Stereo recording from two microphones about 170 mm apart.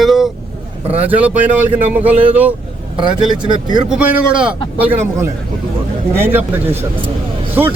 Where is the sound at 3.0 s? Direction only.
25° right (ahead or behind).